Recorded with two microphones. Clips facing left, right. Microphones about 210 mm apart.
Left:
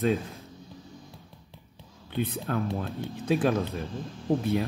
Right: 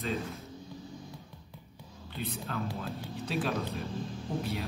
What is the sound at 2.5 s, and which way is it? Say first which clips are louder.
Speech: left 6 dB; 50° left (ahead or behind).